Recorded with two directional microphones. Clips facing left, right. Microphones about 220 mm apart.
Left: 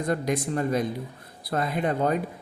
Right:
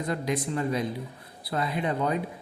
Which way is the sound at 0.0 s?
45° left (ahead or behind).